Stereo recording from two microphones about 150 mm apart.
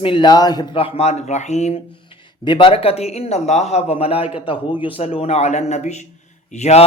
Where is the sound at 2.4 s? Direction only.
35° left (ahead or behind).